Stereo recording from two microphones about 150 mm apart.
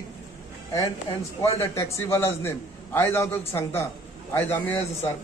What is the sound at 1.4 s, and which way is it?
A man's voice, 20° left (ahead or behind).